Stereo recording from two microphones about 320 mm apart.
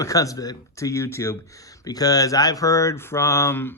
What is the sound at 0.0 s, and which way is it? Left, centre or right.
Speech, centre.